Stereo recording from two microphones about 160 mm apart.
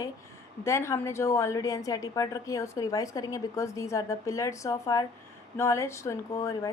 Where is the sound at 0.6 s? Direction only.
15° left (ahead or behind).